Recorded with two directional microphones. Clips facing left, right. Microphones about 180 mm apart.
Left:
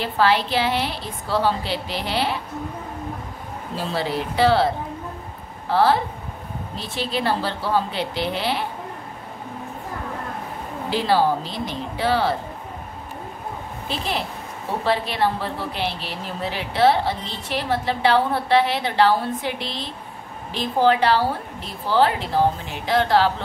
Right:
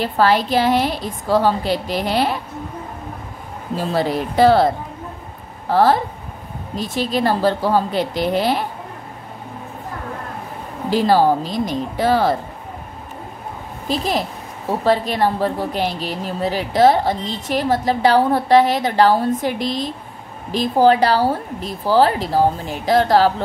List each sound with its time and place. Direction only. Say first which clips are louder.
0.0 s a woman's voice: right 3 dB; 45° right (ahead or behind)
3.7 s a woman's voice: right 5 dB; 45° right (ahead or behind)
5.7 s a woman's voice: right 3 dB; 45° right (ahead or behind)
10.9 s a woman's voice: right 5 dB; 45° right (ahead or behind)
13.8 s a woman's voice: right 6 dB; 40° right (ahead or behind)